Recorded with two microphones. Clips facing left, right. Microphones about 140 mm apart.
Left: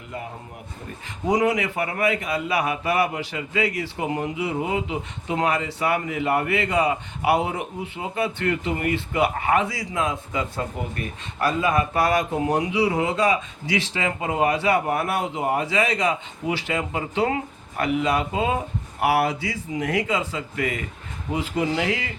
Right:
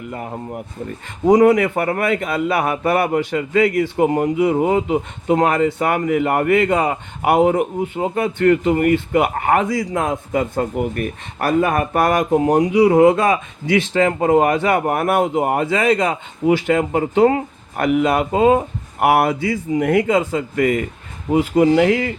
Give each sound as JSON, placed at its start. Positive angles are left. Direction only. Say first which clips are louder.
{"t": 1.3, "sound": "a man's voice", "louder": "right 9 dB", "side_deg": -50}
{"t": 17.8, "sound": "a man's voice", "louder": "right 6 dB", "side_deg": -55}